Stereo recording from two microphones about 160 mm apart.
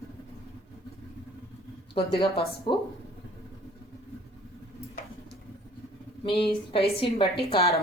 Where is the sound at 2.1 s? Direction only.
35° left (ahead or behind).